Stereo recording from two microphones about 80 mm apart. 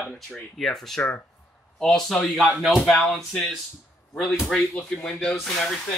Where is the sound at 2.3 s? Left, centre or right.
Centre.